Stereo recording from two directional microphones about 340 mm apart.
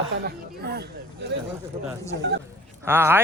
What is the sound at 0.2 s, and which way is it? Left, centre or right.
Speech, right.